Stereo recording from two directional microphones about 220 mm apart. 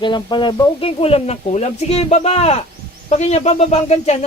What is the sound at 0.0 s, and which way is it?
Speech, 20° left (ahead or behind).